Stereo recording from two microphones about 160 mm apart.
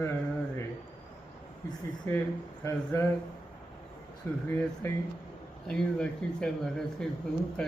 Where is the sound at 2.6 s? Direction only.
15° left (ahead or behind).